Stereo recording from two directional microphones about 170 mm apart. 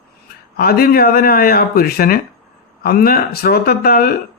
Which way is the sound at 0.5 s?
65° left (ahead or behind).